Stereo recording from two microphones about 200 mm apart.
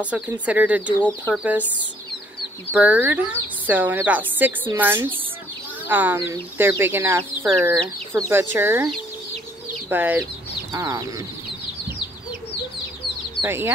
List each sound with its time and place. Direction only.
0.0 s a woman's voice: 5° right (ahead or behind)
2.7 s a woman's voice: 5° right (ahead or behind)
13.4 s speech: 10° right (ahead or behind)